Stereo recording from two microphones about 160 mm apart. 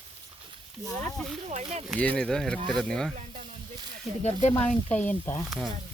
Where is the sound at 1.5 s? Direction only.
45° right (ahead or behind).